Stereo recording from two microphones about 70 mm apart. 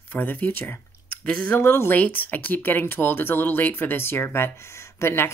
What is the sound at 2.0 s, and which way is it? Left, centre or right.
Speech, left.